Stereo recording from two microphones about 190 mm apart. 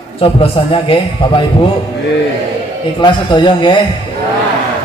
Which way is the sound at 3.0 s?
25° left (ahead or behind).